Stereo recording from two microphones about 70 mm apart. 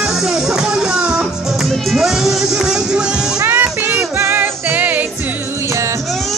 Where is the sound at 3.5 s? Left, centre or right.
Right.